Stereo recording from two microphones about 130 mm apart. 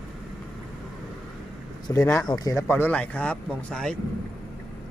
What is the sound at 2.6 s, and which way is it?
Speech, 15° left (ahead or behind).